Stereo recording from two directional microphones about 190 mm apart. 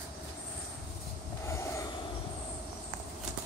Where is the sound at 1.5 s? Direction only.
15° left (ahead or behind).